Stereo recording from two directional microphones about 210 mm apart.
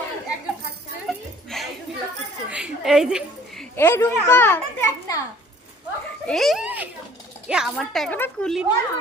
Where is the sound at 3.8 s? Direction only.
10° left (ahead or behind).